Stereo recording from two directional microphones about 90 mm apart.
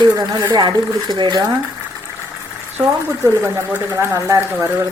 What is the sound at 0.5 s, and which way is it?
Speech, 50° right (ahead or behind).